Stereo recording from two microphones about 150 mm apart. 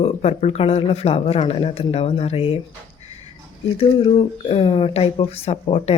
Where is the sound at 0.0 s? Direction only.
45° left (ahead or behind).